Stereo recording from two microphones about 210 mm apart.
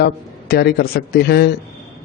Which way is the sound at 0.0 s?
50° left (ahead or behind).